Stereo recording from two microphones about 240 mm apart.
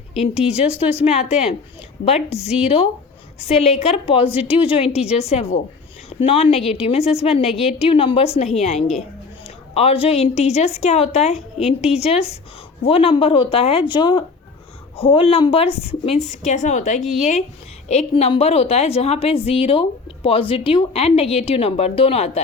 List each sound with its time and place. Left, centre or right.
0.3 s a woman's voice: left
17.0 s speech: centre
17.8 s a woman's voice: left